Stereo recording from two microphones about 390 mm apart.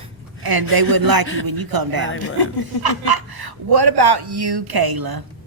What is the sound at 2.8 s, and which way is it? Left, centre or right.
Speech, right.